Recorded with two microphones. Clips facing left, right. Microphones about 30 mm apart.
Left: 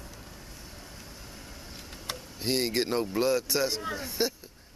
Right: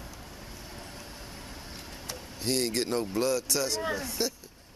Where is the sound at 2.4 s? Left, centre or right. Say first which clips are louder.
Left 1 dB; centre.